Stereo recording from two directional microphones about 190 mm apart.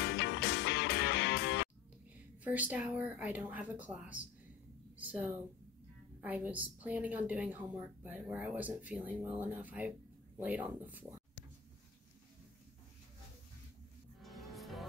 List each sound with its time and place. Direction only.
0.0 s music: 65° left (ahead or behind)
2.4 s a woman's voice: 10° right (ahead or behind)
4.9 s a sound: 10° right (ahead or behind)
6.2 s a woman's voice: 10° right (ahead or behind)
14.2 s music: centre (ahead or behind)